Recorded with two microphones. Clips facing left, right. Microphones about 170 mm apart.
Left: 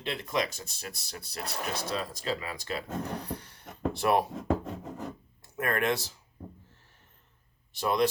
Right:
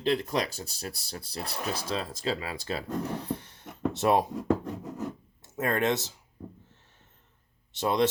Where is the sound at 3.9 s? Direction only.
20° right (ahead or behind).